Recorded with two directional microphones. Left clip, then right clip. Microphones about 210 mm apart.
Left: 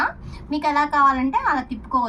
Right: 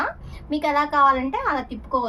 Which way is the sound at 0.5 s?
35° right (ahead or behind).